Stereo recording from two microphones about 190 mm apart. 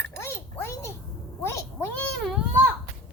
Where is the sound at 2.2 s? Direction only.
Centre (ahead or behind).